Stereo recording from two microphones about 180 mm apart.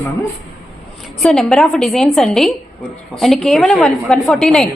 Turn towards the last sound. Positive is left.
turn(degrees=0)  # may be behind; listen again after turning